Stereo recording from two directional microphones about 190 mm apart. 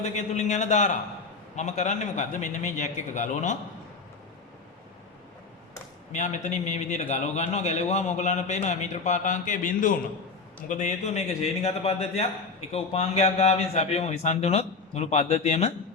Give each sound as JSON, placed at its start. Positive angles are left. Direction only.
{"t": 0.0, "sound": "a man's voice", "side_deg": 40}
{"t": 6.1, "sound": "a man's voice", "side_deg": 35}